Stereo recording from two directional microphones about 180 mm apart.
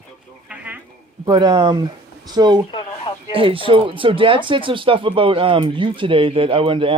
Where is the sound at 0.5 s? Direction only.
10° right (ahead or behind).